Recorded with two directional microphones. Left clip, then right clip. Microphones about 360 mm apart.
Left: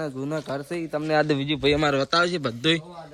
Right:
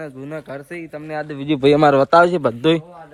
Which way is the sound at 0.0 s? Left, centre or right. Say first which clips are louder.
Left 1 dB; centre.